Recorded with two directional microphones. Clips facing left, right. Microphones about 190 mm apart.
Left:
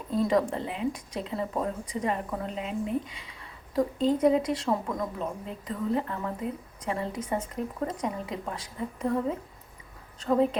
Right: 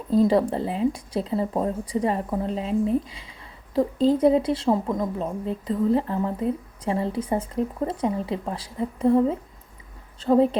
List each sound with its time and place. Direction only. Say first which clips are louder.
0.1 s speech: right 6 dB; 30° right (ahead or behind)